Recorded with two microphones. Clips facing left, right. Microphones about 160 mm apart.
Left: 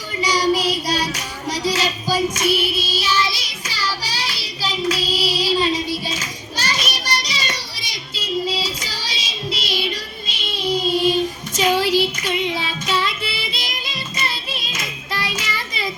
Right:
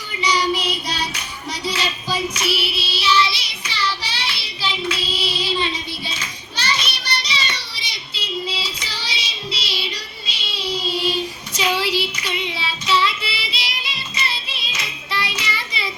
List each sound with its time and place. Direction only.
0.2 s child singing: 40° left (ahead or behind)